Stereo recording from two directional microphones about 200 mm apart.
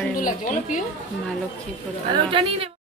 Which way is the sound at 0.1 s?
40° left (ahead or behind).